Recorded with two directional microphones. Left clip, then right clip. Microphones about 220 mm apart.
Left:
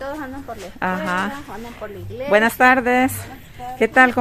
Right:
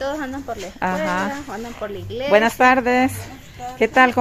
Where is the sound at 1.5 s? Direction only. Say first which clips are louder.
Right 3 dB; 40° right (ahead or behind).